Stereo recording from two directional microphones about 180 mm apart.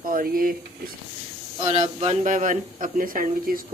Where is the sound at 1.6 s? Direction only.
40° right (ahead or behind).